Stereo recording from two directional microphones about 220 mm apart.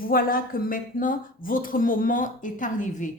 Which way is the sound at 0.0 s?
40° left (ahead or behind).